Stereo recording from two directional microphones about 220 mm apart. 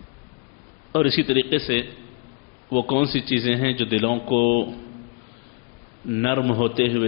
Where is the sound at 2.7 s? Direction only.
30° left (ahead or behind).